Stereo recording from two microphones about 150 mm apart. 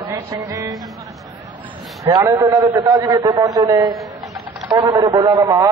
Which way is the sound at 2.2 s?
20° right (ahead or behind).